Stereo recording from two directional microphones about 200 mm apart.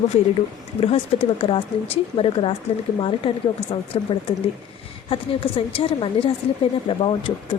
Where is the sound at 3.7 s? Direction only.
25° left (ahead or behind).